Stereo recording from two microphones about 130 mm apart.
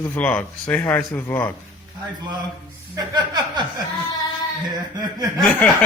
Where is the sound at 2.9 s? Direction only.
30° right (ahead or behind).